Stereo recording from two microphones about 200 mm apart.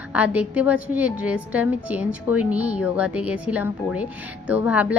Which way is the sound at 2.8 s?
5° right (ahead or behind).